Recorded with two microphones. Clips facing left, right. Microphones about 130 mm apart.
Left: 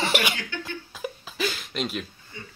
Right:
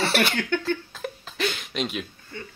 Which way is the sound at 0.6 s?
10° left (ahead or behind).